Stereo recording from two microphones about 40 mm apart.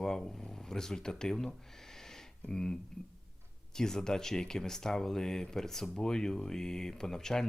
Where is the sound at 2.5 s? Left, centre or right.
Centre.